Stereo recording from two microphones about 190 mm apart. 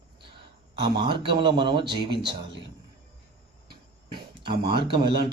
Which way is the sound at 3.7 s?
25° right (ahead or behind).